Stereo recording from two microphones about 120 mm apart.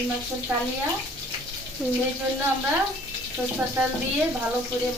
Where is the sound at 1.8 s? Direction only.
20° right (ahead or behind).